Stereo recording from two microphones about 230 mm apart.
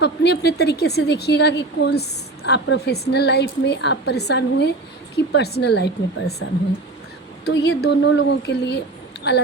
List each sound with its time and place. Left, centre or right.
0.0 s a woman's voice: left
7.4 s a woman's voice: left